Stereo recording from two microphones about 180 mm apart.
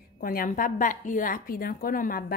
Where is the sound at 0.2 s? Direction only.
55° left (ahead or behind).